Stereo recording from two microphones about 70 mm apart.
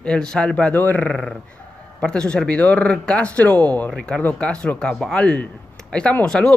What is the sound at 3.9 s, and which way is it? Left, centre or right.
A man's voice, centre.